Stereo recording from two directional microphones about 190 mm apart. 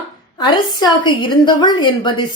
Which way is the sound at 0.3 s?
20° left (ahead or behind).